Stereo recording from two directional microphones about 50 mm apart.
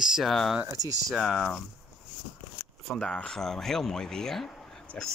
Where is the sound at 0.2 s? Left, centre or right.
Centre.